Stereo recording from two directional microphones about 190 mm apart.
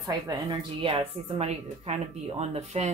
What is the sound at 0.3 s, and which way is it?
Speech, 25° right (ahead or behind).